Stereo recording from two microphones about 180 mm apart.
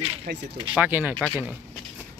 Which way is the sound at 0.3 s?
60° right (ahead or behind).